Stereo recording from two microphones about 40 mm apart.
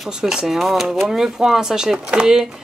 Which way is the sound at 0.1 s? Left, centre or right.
Centre.